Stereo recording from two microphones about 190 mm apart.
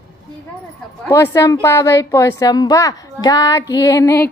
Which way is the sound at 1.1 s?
15° left (ahead or behind).